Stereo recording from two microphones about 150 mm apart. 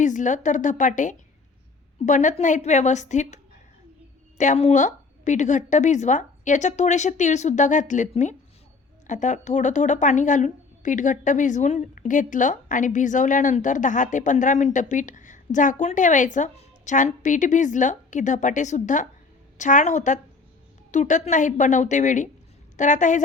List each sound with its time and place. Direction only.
0.0 s a woman's voice: 55° left (ahead or behind)